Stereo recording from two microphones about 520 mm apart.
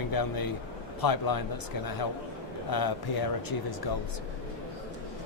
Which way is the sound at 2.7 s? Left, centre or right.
Left.